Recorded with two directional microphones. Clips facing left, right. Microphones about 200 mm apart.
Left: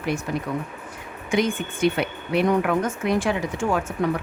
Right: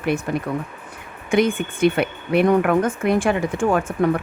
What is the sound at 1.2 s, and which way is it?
Speech, 55° right (ahead or behind).